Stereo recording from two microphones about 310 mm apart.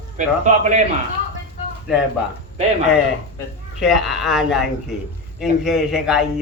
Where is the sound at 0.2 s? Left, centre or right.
Right.